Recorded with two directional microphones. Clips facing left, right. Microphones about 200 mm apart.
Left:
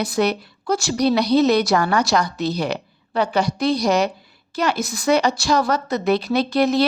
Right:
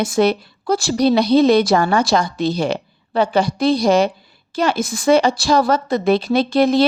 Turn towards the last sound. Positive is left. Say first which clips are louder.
# right 3 dB
turn(degrees=-30)  # may be behind; listen again after turning